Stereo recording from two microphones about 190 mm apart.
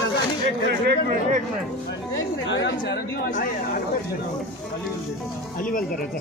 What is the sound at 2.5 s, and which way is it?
Speech, 70° left (ahead or behind).